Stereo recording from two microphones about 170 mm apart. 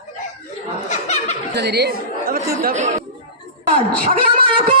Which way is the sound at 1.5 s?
75° right (ahead or behind).